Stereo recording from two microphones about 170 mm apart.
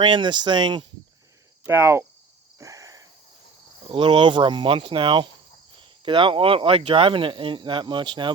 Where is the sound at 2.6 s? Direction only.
20° right (ahead or behind).